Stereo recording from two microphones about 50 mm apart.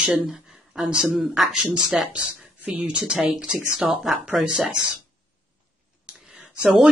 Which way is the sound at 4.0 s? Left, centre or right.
Centre.